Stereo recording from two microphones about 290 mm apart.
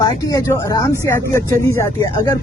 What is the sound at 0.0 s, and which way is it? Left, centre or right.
Speech, centre.